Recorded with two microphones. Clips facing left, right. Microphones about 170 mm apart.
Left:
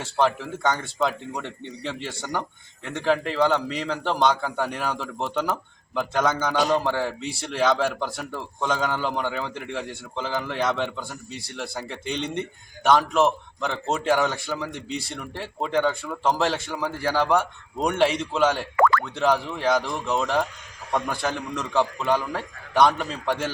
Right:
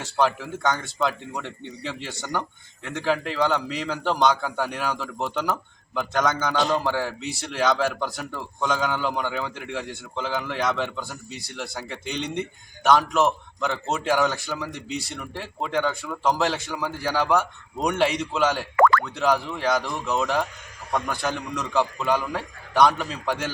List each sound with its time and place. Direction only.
0.0 s speech: centre (ahead or behind)
18.8 s boing: 60° right (ahead or behind)
19.1 s speech: centre (ahead or behind)